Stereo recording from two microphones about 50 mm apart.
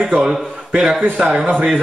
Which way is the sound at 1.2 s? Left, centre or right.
Centre.